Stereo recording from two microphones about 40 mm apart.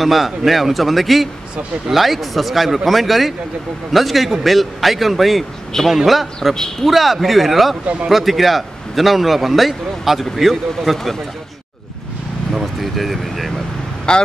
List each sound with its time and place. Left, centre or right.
0.0 s a man's voice: centre
5.7 s a man's voice: centre
6.0 s a man's voice: centre
12.8 s a man's voice: centre
14.1 s speech: left